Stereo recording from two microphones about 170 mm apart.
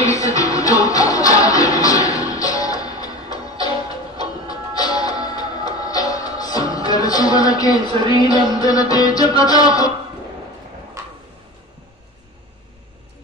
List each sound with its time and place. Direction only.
0.0 s music: 20° left (ahead or behind)
7.9 s music: 30° right (ahead or behind)
8.3 s music: 20° left (ahead or behind)
11.0 s a sound: 15° right (ahead or behind)